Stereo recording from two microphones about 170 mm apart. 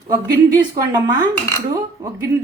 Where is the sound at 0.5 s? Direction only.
25° right (ahead or behind).